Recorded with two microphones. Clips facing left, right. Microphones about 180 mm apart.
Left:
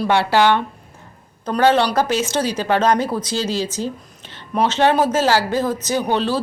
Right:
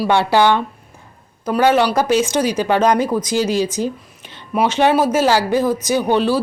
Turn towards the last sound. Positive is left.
turn(degrees=-15)  # may be behind; listen again after turning